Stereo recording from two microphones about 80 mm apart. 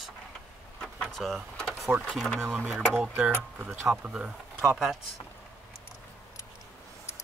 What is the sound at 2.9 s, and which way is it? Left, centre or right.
Speech, centre.